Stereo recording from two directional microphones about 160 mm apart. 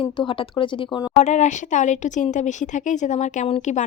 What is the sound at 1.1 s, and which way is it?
Speech, 45° left (ahead or behind).